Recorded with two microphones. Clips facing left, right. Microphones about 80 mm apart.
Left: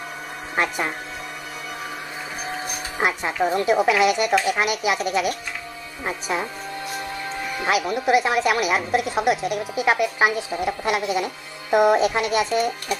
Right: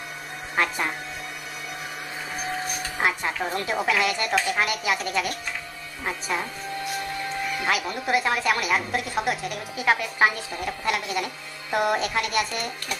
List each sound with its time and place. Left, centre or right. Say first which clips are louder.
3.0 s a woman's voice: left 4 dB; centre
7.6 s a woman's voice: left 7 dB; centre